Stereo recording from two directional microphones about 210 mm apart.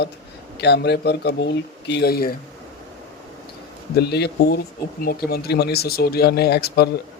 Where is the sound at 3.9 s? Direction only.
50° left (ahead or behind).